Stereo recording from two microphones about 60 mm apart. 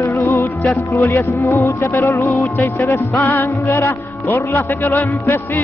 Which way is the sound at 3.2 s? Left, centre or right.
Left.